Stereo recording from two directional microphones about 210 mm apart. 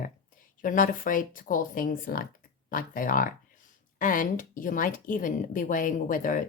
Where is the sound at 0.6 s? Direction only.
40° left (ahead or behind).